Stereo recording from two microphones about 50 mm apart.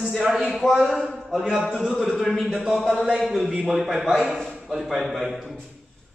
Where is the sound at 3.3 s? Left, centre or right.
Centre.